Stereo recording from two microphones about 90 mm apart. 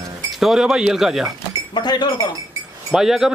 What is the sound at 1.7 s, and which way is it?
Speech, 55° left (ahead or behind).